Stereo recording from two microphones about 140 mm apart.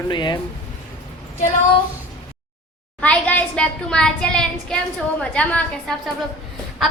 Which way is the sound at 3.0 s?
10° left (ahead or behind).